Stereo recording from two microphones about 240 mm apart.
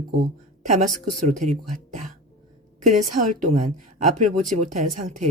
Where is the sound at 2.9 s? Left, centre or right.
Right.